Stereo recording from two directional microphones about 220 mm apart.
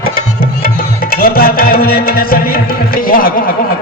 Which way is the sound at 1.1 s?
40° left (ahead or behind).